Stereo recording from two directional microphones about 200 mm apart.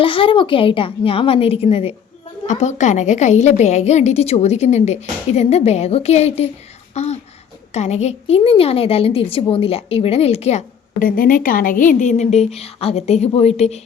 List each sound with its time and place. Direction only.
0.0 s a woman's voice: 25° left (ahead or behind)
11.0 s a woman's voice: 45° left (ahead or behind)